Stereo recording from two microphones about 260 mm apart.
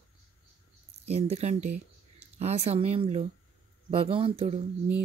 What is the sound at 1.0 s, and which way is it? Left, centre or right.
Speech, right.